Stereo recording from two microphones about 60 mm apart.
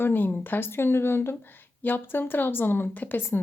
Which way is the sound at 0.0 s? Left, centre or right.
Left.